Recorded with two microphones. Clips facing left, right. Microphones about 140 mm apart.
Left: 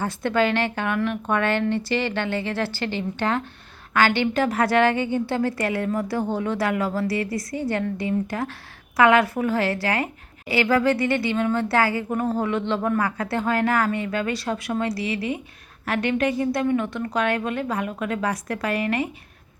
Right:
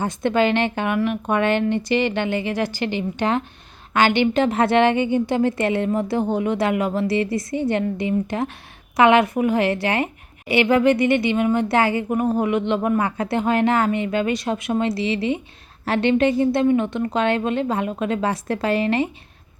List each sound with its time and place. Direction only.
0.0 s a woman's voice: 20° right (ahead or behind)